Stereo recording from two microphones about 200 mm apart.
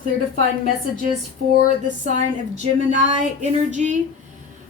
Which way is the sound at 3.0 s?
35° right (ahead or behind).